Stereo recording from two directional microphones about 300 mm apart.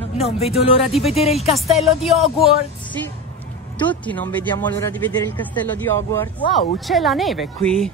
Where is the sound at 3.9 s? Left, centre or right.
Centre.